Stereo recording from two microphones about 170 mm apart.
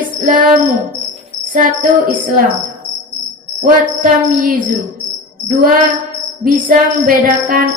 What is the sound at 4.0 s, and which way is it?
Child singing, 50° right (ahead or behind).